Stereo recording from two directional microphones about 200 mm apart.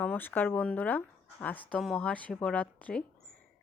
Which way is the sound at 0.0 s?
10° left (ahead or behind).